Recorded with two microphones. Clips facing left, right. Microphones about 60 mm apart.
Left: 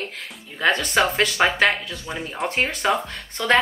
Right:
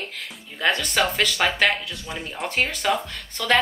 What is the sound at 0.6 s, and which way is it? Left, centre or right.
Speech, left.